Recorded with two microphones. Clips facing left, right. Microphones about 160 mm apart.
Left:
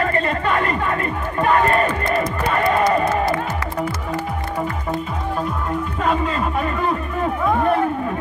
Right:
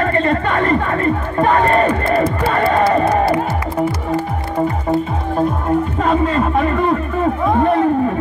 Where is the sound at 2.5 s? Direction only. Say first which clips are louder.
Right 2 dB; 30° right (ahead or behind).